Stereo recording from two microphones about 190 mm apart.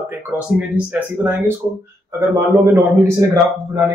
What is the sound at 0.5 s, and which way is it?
Speech, 5° right (ahead or behind).